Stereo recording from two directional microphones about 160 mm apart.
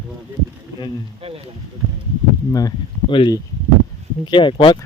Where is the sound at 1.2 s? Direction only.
35° right (ahead or behind).